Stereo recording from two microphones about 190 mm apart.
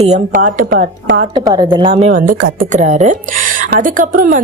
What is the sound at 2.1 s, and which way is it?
A woman's voice, 45° right (ahead or behind).